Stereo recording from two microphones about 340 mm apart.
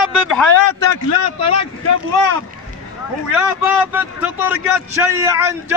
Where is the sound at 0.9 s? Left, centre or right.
Left.